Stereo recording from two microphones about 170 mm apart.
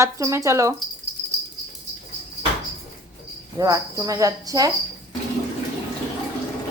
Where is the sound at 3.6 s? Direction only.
20° right (ahead or behind).